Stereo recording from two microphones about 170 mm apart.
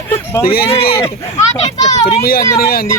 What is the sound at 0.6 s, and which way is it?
Speech, 35° left (ahead or behind).